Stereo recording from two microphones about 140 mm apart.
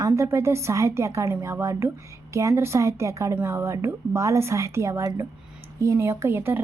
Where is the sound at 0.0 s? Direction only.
20° right (ahead or behind).